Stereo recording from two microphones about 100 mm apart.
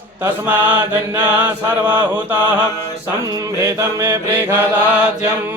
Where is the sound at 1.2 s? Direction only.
15° right (ahead or behind).